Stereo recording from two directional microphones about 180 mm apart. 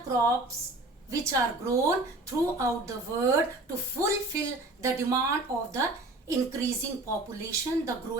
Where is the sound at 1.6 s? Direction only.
15° right (ahead or behind).